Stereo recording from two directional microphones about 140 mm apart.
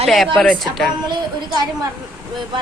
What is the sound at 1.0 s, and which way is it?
Speech, 35° right (ahead or behind).